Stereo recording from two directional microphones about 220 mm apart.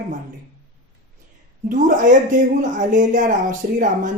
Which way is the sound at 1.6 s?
35° right (ahead or behind).